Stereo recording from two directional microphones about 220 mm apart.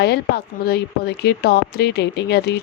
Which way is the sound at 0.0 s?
50° left (ahead or behind).